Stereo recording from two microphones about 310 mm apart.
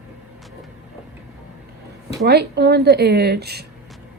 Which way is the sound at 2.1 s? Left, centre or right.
Right.